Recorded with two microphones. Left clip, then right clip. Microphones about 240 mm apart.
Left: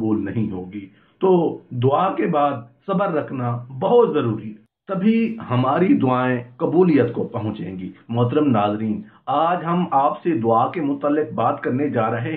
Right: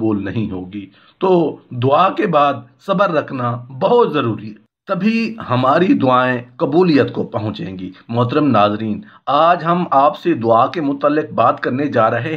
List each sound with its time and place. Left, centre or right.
0.0 s speech: right